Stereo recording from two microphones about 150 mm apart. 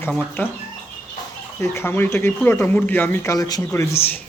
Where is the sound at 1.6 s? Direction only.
15° left (ahead or behind).